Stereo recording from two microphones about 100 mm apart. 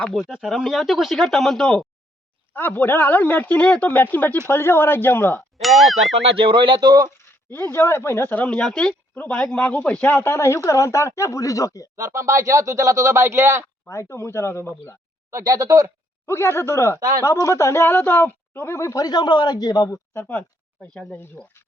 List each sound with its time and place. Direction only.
0.1 s speech: centre (ahead or behind)
2.5 s speech: 20° left (ahead or behind)
5.5 s speech: centre (ahead or behind)
6.2 s speech: 60° right (ahead or behind); by 7.1 s 45° right (ahead or behind)
7.5 s speech: 20° left (ahead or behind)
11.9 s speech: 30° right (ahead or behind)
13.8 s speech: 25° left (ahead or behind)
15.3 s speech: 35° right (ahead or behind)
16.2 s speech: 25° left (ahead or behind)
17.0 s speech: 40° right (ahead or behind)
17.4 s speech: 30° left (ahead or behind)
19.0 s a man's voice: 45° left (ahead or behind)
20.1 s speech: 20° left (ahead or behind)